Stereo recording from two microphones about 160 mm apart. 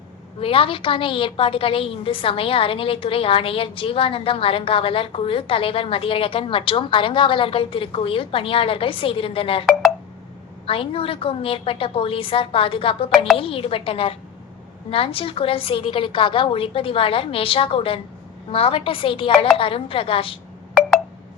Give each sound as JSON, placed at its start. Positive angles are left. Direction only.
{"t": 0.3, "sound": "a woman's voice", "side_deg": 35}
{"t": 10.7, "sound": "a woman's voice", "side_deg": 35}